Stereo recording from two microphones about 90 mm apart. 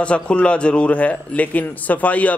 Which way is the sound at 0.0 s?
10° left (ahead or behind).